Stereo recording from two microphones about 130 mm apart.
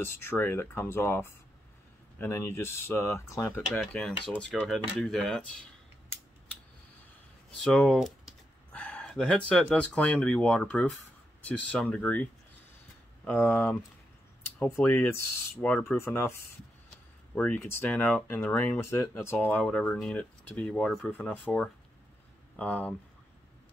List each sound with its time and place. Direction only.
0.0 s speech: 20° left (ahead or behind)
3.9 s speech: 10° left (ahead or behind)
7.6 s speech: 5° left (ahead or behind)